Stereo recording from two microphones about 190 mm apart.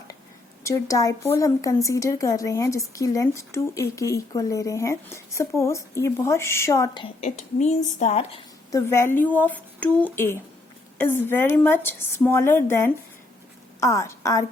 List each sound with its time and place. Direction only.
0.6 s speech: 15° left (ahead or behind)
7.2 s a woman's voice: 40° left (ahead or behind)
8.7 s a woman's voice: 15° left (ahead or behind)